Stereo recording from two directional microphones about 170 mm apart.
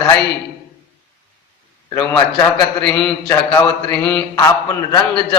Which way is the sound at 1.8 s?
20° left (ahead or behind).